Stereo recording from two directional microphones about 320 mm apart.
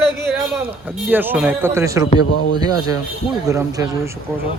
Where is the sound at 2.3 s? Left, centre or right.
Left.